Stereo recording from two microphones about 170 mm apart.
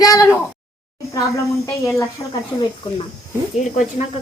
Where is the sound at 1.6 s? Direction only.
20° left (ahead or behind).